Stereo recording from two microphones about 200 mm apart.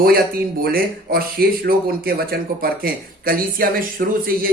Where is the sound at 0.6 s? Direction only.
50° right (ahead or behind).